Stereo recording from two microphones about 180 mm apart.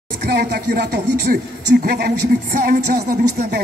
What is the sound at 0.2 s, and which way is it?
Speech, 65° right (ahead or behind).